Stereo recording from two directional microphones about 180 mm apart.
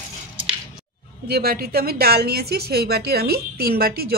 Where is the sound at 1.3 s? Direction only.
60° right (ahead or behind).